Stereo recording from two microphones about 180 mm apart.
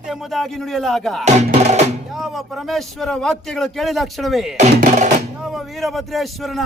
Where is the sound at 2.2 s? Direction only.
Centre (ahead or behind).